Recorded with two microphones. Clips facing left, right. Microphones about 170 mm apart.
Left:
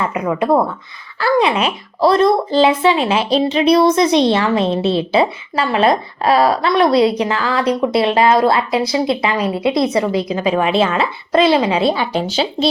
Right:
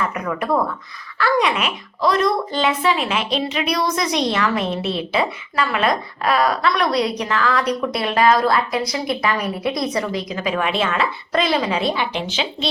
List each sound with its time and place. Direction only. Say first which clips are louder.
0.0 s speech: left 5 dB; 25° left (ahead or behind)